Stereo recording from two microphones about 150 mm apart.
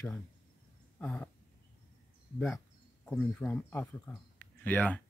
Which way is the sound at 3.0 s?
5° left (ahead or behind).